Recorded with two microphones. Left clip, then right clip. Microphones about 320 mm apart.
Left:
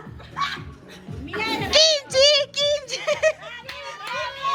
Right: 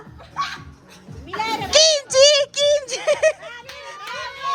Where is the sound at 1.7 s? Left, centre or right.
Right.